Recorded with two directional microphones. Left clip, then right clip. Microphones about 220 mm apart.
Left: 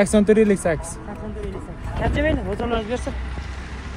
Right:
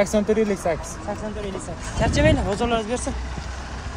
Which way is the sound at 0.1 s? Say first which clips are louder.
Left 4 dB; 45° left (ahead or behind).